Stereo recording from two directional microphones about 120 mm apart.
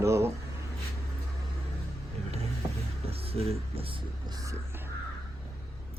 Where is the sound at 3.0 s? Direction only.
55° right (ahead or behind).